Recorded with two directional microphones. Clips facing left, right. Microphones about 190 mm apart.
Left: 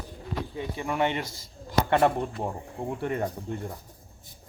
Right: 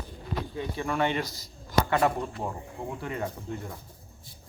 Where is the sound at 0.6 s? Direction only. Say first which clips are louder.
Left 1 dB; 15° left (ahead or behind).